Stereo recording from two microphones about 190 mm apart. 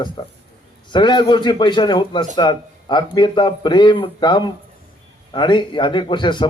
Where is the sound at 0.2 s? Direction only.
25° left (ahead or behind).